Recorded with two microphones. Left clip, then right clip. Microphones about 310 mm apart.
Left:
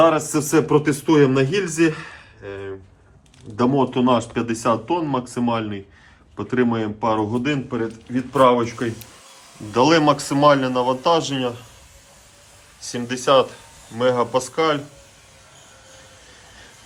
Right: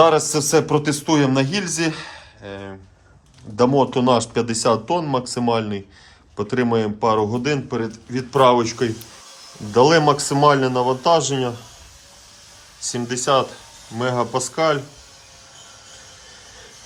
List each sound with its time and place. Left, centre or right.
0.0 s a man's voice: centre
12.9 s a man's voice: centre